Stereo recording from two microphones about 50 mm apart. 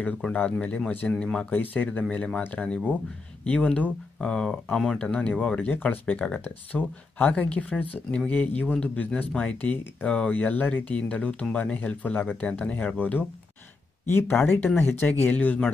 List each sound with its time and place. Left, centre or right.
0.3 s speech: left
1.5 s speech: left
2.0 s speech: left
6.4 s speech: left
14.0 s speech: left